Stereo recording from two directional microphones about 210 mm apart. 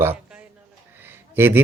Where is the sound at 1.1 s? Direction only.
10° right (ahead or behind).